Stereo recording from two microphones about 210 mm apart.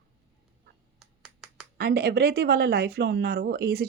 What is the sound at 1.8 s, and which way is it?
Speech, 50° right (ahead or behind).